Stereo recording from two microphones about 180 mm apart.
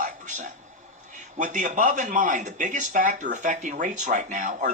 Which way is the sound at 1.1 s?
45° right (ahead or behind).